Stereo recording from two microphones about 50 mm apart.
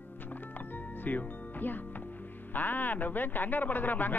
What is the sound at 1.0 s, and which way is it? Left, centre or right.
A man's voice, left.